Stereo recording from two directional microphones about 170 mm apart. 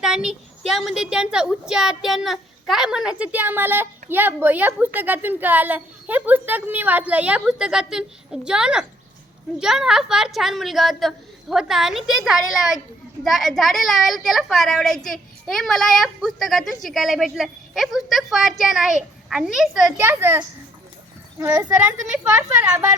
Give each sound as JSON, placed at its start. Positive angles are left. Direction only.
{"t": 0.0, "sound": "a woman's voice", "side_deg": -5}
{"t": 20.0, "sound": "a woman's voice", "side_deg": -15}
{"t": 21.8, "sound": "a woman's voice", "side_deg": -10}